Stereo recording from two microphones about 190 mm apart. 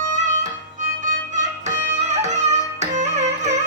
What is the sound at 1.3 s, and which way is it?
Music, 40° right (ahead or behind).